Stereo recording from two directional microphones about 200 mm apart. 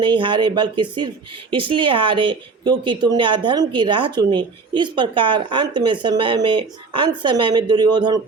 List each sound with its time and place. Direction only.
0.0 s speech: 25° right (ahead or behind)